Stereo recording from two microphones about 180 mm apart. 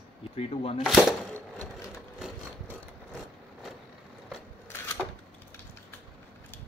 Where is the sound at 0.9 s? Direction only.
Centre (ahead or behind).